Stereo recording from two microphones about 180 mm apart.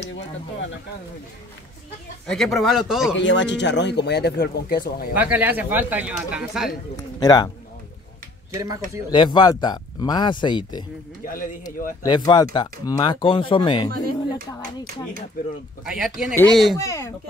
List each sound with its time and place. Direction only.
2.2 s speech: centre (ahead or behind)
3.2 s speech: 90° left; by 5.1 s 55° left (ahead or behind)
5.1 s speech: 10° right (ahead or behind)
7.2 s a man's voice: 20° left (ahead or behind)
8.5 s speech: 20° right (ahead or behind)
9.1 s a man's voice: 25° left (ahead or behind)
12.0 s a man's voice: 20° left (ahead or behind)
15.8 s speech: 5° right (ahead or behind)
16.7 s speech: 15° left (ahead or behind)